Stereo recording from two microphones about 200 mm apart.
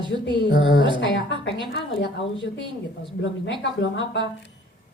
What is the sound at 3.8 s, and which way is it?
Speech, 65° left (ahead or behind).